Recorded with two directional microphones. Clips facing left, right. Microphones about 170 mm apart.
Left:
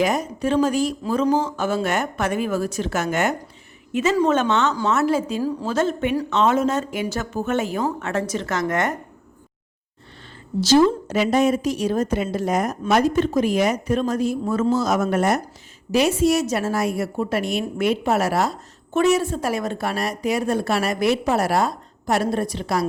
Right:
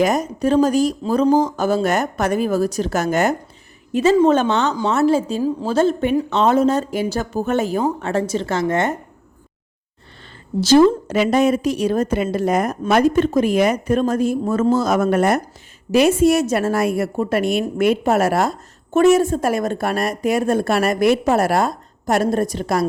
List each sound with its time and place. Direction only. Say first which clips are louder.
0.0 s speech: right 4 dB; 45° right (ahead or behind)
5.4 s a woman's voice: right 4 dB; 20° right (ahead or behind)
10.6 s a woman's voice: right 4 dB; 55° right (ahead or behind)